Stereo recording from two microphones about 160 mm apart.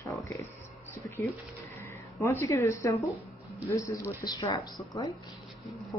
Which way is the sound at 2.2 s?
15° left (ahead or behind).